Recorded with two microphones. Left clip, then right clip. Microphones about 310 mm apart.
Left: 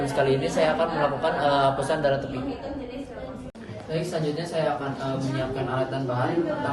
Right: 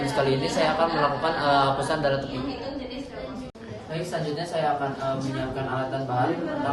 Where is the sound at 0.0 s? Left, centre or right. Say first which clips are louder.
Left 1 dB; centre.